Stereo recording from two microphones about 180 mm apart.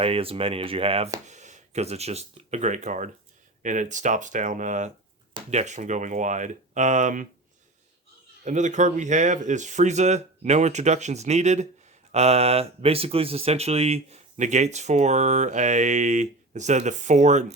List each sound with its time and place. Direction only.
0.0 s speech: 30° right (ahead or behind)
8.4 s speech: 40° right (ahead or behind)